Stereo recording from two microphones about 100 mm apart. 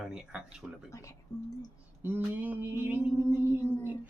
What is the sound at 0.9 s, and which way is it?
Speech, 30° left (ahead or behind).